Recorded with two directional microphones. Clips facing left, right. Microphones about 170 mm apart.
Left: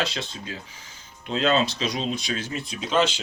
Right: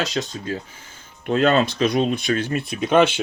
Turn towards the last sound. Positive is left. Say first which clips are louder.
# right 6 dB
turn(degrees=-60)  # may be behind; listen again after turning